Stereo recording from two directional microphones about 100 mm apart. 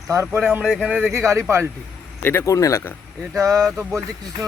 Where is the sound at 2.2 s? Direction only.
25° left (ahead or behind).